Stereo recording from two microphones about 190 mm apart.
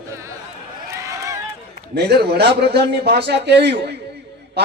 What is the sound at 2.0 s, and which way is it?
Speech, 60° right (ahead or behind).